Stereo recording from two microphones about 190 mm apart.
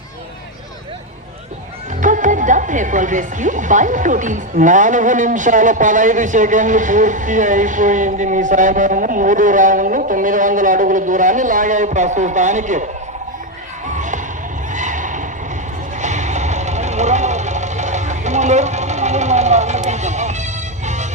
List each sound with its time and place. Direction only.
2.0 s speech: 40° right (ahead or behind)
13.8 s basketball bounce: 40° right (ahead or behind)
14.7 s neigh: 40° right (ahead or behind)
16.0 s vehicle: 40° right (ahead or behind)